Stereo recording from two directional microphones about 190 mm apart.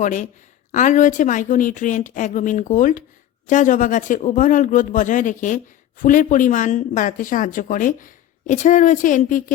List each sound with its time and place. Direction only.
0.0 s speech: 40° left (ahead or behind)